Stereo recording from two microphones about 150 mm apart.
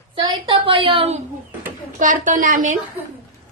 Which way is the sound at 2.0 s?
60° right (ahead or behind).